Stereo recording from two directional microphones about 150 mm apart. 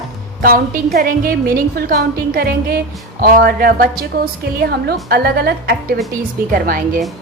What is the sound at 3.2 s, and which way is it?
Speech, 75° right (ahead or behind).